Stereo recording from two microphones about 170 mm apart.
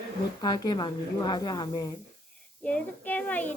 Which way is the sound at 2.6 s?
5° left (ahead or behind).